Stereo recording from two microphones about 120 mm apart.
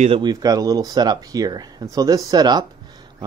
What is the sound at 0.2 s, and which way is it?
Speech, 35° right (ahead or behind).